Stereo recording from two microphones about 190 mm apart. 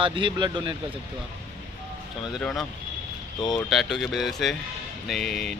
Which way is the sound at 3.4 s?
20° left (ahead or behind).